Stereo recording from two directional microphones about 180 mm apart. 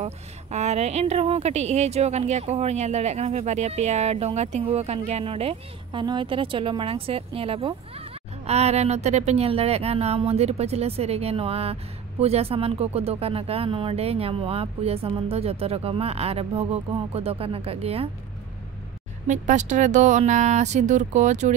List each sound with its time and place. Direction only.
0.0 s speech: 40° right (ahead or behind)
19.2 s speech: 40° right (ahead or behind)